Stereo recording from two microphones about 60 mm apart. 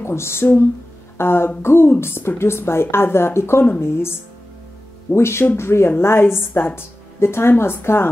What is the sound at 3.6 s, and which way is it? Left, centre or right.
Speech, left.